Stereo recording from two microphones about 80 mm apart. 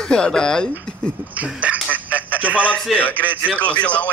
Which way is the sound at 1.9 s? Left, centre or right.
Centre.